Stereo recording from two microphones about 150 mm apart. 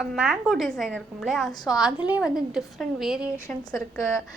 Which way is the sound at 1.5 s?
25° left (ahead or behind).